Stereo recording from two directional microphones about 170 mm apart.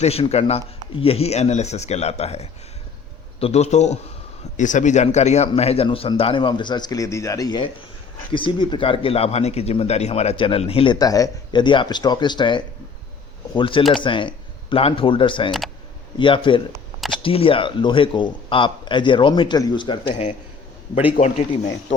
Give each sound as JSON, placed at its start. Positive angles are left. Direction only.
{"t": 0.0, "sound": "a man's voice", "side_deg": 35}
{"t": 10.9, "sound": "a man's voice", "side_deg": 20}
{"t": 21.2, "sound": "a man's voice", "side_deg": 60}